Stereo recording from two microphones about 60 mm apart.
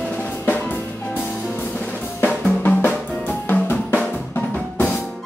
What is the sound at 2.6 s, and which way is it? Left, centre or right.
Drum, left.